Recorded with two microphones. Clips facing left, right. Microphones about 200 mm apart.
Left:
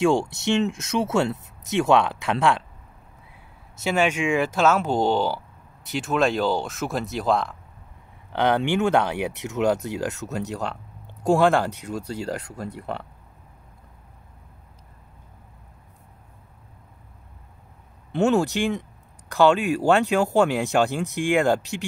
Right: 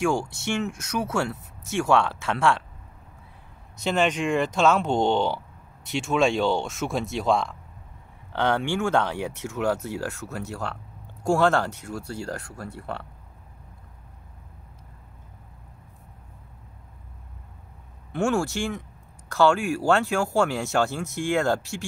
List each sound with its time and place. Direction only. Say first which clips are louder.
0.0 s speech: left 4 dB; 25° left (ahead or behind)
3.8 s speech: left 1 dB; 5° left (ahead or behind)
8.3 s speech: left 3 dB; 15° left (ahead or behind)
18.1 s speech: left 4 dB; 20° left (ahead or behind)